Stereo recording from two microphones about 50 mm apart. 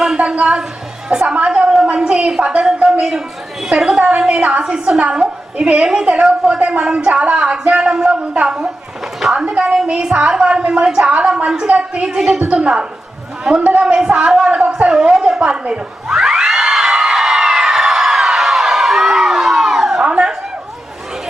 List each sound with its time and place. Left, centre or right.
0.2 s a woman's voice: right
1.9 s a sound: centre
2.4 s a woman's voice: right
4.1 s a woman's voice: right
4.6 s a woman's voice: centre
4.9 s a woman's voice: right
12.0 s a woman's voice: centre
16.1 s a sound: centre